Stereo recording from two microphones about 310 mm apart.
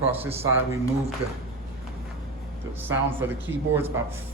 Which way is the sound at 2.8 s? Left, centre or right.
Centre.